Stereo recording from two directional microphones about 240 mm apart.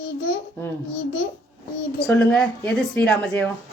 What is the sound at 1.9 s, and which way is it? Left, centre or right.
Speech, centre.